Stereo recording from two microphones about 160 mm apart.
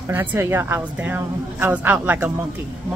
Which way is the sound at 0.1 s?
15° right (ahead or behind).